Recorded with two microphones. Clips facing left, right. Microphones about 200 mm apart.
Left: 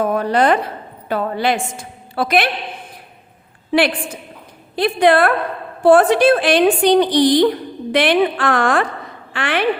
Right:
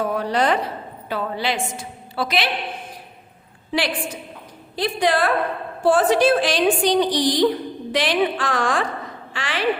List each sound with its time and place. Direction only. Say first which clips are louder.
0.0 s a woman's voice: left 5 dB; 50° left (ahead or behind)
3.7 s a woman's voice: left 7 dB; 60° left (ahead or behind)